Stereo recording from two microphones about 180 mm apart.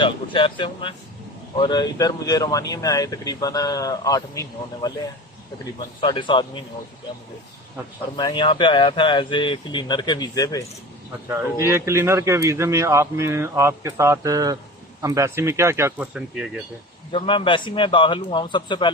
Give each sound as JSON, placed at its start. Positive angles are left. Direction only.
{"t": 0.0, "sound": "speech", "side_deg": 30}
{"t": 6.0, "sound": "speech", "side_deg": 25}
{"t": 8.1, "sound": "speech", "side_deg": 25}
{"t": 11.6, "sound": "speech", "side_deg": -15}
{"t": 17.1, "sound": "speech", "side_deg": 30}